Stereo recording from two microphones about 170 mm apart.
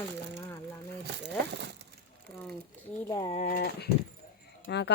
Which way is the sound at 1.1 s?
80° right.